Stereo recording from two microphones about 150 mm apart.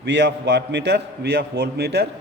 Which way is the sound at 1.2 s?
90° right.